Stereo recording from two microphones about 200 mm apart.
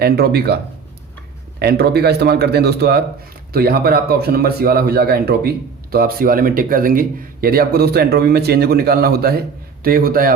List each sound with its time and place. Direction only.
0.0 s speech: 55° right (ahead or behind)